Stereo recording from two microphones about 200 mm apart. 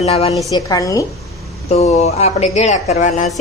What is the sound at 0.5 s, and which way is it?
Speech, 20° left (ahead or behind).